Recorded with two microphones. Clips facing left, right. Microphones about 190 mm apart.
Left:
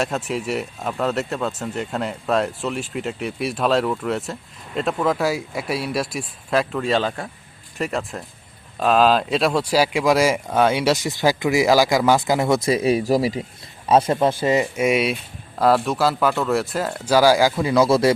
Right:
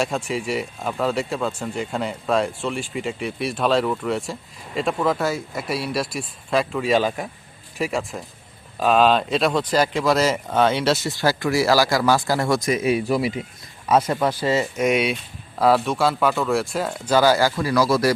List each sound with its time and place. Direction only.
0.0 s speech: 5° left (ahead or behind)
6.8 s speech: 10° right (ahead or behind); by 13.4 s 35° left (ahead or behind)
13.8 s speech: 25° left (ahead or behind)
14.8 s speech: centre (ahead or behind); by 18.1 s 25° left (ahead or behind)